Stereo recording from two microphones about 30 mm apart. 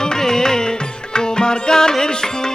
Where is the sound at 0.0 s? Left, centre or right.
Left.